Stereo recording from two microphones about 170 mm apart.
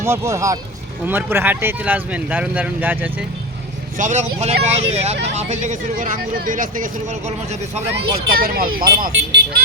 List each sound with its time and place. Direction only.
0.0 s speech: 15° right (ahead or behind)
3.9 s speech: 45° right (ahead or behind)
8.3 s speech: 60° right (ahead or behind); by 9.6 s 80° right